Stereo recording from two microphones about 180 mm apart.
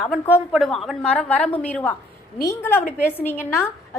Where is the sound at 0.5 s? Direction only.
Centre (ahead or behind).